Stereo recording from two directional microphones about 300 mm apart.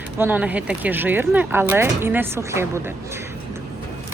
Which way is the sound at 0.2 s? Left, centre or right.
Centre.